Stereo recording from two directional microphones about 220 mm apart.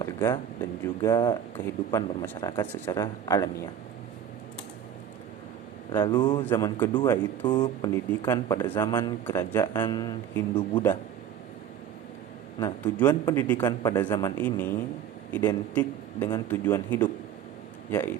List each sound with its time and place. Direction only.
0.0 s speech: 15° left (ahead or behind)
5.9 s speech: 20° left (ahead or behind)
13.1 s speech: 15° left (ahead or behind)